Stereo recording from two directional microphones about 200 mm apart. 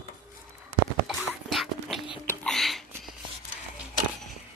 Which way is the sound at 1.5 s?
Centre (ahead or behind).